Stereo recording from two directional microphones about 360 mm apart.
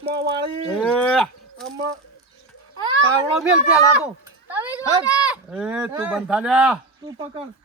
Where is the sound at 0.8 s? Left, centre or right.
Centre.